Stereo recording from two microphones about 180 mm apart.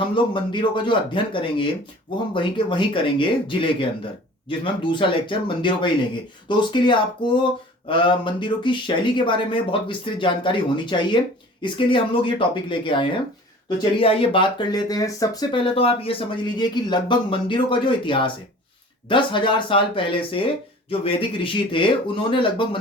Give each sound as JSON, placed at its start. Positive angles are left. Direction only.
{"t": 0.1, "sound": "speech", "side_deg": 25}